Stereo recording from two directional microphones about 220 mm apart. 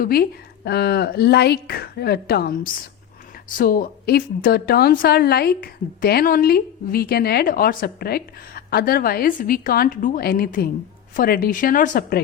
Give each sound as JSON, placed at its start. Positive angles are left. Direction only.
{"t": 0.0, "sound": "a woman's voice", "side_deg": 45}